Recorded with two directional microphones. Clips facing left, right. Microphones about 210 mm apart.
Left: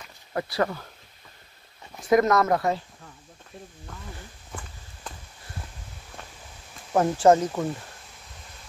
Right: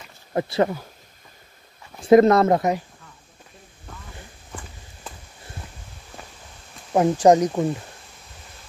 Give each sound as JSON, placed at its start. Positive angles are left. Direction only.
{"t": 0.3, "sound": "speech", "side_deg": -25}
{"t": 2.0, "sound": "speech", "side_deg": -30}
{"t": 6.9, "sound": "speech", "side_deg": -15}